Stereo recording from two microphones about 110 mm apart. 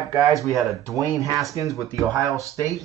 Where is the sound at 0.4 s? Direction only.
Centre (ahead or behind).